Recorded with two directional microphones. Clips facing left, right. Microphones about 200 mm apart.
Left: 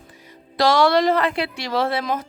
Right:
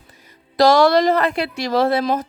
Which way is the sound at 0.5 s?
40° right (ahead or behind).